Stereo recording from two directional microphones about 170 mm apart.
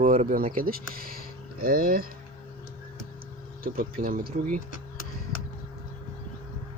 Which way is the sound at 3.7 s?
60° right (ahead or behind).